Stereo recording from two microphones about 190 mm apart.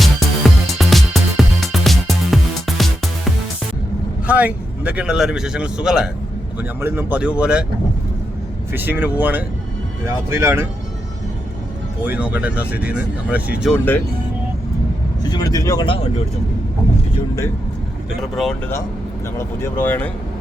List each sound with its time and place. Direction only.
0.0 s music: centre (ahead or behind)
4.3 s a man's voice: 5° right (ahead or behind)
8.7 s speech: 10° right (ahead or behind)
12.0 s speech: 5° right (ahead or behind)
15.2 s speech: 20° left (ahead or behind)
18.2 s a man's voice: centre (ahead or behind)
19.4 s speech: 10° left (ahead or behind)